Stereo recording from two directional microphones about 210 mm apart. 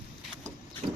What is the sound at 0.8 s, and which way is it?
Engine, 30° right (ahead or behind).